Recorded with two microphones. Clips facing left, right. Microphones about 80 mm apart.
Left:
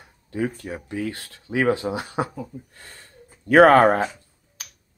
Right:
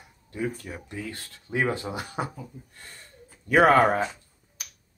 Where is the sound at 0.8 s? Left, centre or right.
Left.